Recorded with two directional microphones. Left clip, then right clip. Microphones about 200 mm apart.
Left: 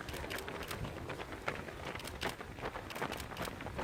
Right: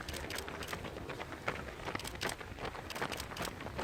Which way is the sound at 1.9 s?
35° right (ahead or behind).